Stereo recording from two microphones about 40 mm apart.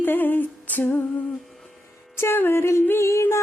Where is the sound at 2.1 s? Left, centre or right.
Left.